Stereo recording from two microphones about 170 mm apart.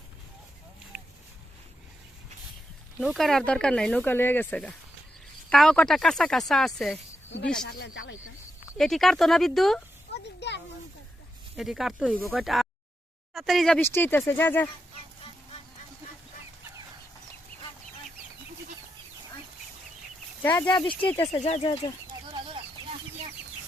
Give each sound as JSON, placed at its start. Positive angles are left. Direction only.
{"t": 0.9, "sound": "a sound", "side_deg": -5}
{"t": 3.0, "sound": "speech", "side_deg": 0}
{"t": 8.8, "sound": "speech", "side_deg": 0}
{"t": 10.1, "sound": "a sound", "side_deg": 90}
{"t": 11.5, "sound": "speech", "side_deg": 0}
{"t": 20.4, "sound": "speech", "side_deg": 10}
{"t": 20.7, "sound": "speech", "side_deg": 30}
{"t": 21.4, "sound": "speech", "side_deg": 40}
{"t": 21.7, "sound": "speech", "side_deg": 30}